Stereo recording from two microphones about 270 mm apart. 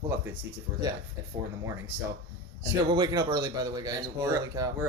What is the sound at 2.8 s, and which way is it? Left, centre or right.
Speech, centre.